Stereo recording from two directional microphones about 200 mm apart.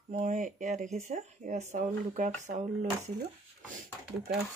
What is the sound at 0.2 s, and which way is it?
Speech, 40° right (ahead or behind).